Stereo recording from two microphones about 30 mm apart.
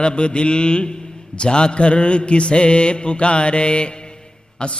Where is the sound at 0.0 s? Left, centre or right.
Left.